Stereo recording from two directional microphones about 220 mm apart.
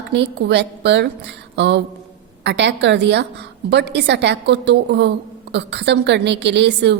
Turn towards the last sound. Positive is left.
turn(degrees=-50)  # may be behind; listen again after turning